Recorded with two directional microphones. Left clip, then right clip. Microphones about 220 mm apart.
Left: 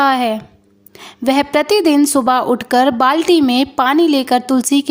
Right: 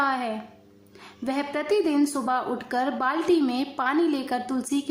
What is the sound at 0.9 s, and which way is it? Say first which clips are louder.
Speech: left 14 dB; 40° left (ahead or behind).